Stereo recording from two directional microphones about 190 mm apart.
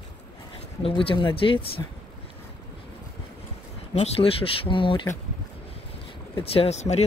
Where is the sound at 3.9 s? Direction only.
30° left (ahead or behind).